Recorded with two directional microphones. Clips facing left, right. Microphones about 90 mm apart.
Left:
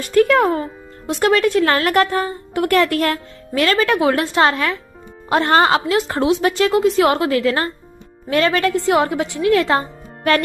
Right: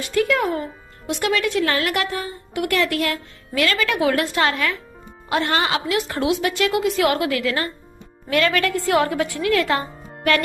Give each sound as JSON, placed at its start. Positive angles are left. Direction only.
{"t": 0.0, "sound": "speech", "side_deg": 45}
{"t": 0.5, "sound": "a woman's voice", "side_deg": 35}